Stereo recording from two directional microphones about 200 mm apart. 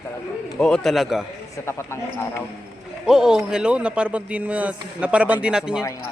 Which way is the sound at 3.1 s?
5° right (ahead or behind).